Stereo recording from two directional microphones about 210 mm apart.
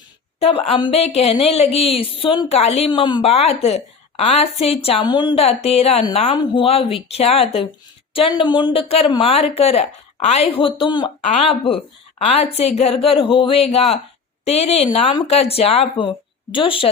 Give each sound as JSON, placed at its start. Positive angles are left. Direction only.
{"t": 0.3, "sound": "speech", "side_deg": 30}